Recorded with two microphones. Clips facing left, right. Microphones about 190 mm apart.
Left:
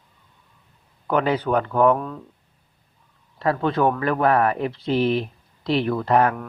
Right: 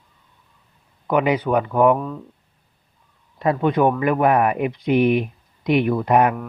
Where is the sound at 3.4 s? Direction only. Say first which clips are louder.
Right 3 dB; 20° right (ahead or behind).